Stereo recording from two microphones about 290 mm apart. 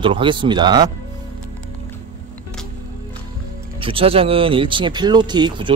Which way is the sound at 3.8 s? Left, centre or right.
Centre.